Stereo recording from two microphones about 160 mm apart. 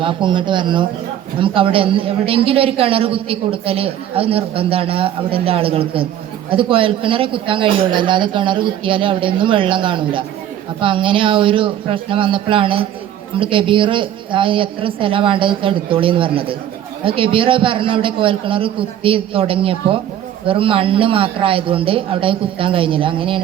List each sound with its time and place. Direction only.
0.0 s a man's voice: 30° right (ahead or behind)